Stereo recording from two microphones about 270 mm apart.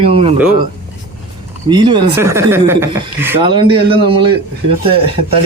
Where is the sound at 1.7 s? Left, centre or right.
Centre.